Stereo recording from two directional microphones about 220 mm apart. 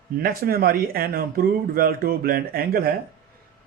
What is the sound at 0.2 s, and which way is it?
Speech, 40° right (ahead or behind).